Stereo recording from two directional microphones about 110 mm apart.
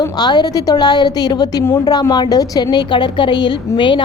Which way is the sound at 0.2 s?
40° left (ahead or behind).